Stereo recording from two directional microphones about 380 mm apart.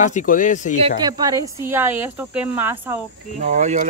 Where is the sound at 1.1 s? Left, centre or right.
Centre.